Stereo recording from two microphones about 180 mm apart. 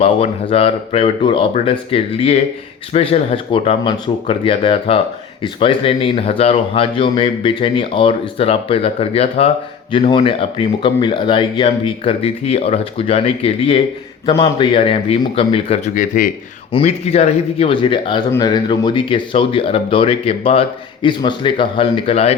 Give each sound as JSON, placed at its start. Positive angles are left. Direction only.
{"t": 0.0, "sound": "speech", "side_deg": 35}
{"t": 16.7, "sound": "speech", "side_deg": 35}